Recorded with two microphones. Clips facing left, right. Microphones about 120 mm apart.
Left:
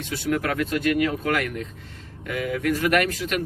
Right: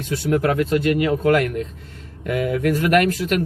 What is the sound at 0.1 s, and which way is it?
Speech, 35° right (ahead or behind).